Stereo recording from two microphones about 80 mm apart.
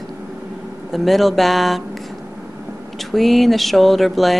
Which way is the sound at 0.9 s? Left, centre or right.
Centre.